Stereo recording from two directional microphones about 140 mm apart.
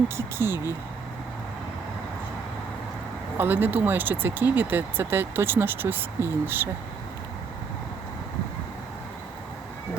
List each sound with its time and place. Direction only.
0.2 s speech: 15° right (ahead or behind)
3.3 s speech: 15° right (ahead or behind)